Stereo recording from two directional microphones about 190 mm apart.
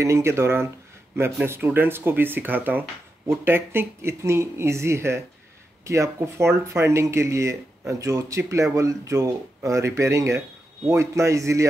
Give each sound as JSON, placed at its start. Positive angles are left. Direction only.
{"t": 0.0, "sound": "speech", "side_deg": -15}